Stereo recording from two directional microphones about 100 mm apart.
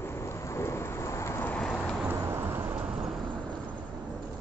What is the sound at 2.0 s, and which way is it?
Vehicle, 25° right (ahead or behind).